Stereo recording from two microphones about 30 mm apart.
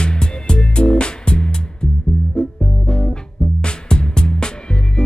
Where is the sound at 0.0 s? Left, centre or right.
Left.